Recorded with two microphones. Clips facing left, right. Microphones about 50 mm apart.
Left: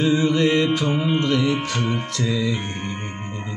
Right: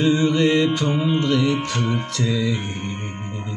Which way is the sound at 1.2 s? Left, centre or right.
Centre.